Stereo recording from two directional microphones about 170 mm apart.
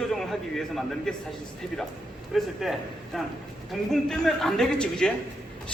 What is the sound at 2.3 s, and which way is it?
A man's voice, centre (ahead or behind).